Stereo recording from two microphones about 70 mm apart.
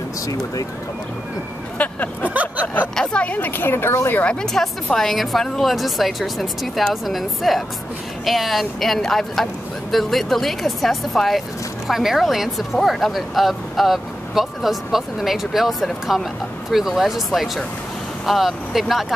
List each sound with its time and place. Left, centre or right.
1.8 s vehicle: centre
2.2 s a sound: right
2.6 s a sound: left
3.0 s speech: centre; by 4.1 s left
4.1 s speech: centre
4.9 s speech: centre